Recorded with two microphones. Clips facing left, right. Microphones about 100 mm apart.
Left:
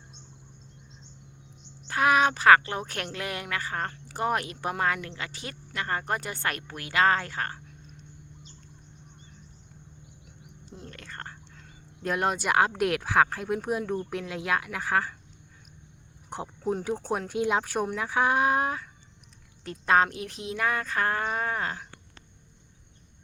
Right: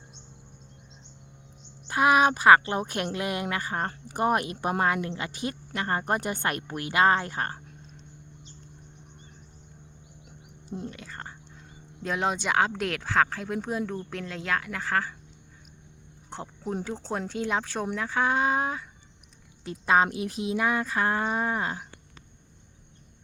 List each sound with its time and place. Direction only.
1.9 s speech: 15° right (ahead or behind)
10.8 s speech: 15° right (ahead or behind)
12.0 s speech: 5° left (ahead or behind)
16.3 s speech: 10° left (ahead or behind); by 21.8 s 15° right (ahead or behind)